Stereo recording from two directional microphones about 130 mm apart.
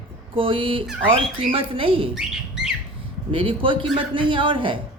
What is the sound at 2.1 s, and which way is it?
Speech, 5° right (ahead or behind).